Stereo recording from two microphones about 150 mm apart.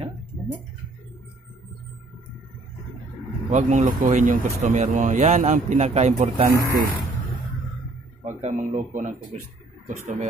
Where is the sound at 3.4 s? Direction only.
55° right (ahead or behind).